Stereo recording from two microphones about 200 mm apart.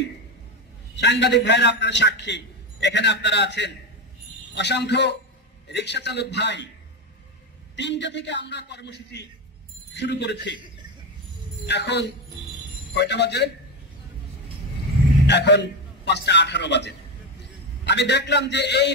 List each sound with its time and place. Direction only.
0.9 s a man's voice: 60° left (ahead or behind)
7.7 s a man's voice: 60° left (ahead or behind)
11.6 s a man's voice: 60° left (ahead or behind)
15.2 s a man's voice: 60° left (ahead or behind)